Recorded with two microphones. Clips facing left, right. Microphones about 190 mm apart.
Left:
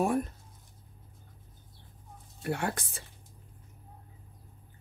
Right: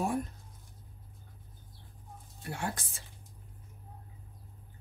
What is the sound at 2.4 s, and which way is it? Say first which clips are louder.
Speech: left 5 dB; 65° left (ahead or behind).